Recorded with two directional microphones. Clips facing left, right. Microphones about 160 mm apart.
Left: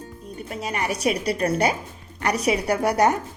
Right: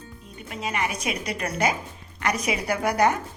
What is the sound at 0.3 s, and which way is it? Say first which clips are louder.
A woman's voice: left 1 dB; 40° left (ahead or behind).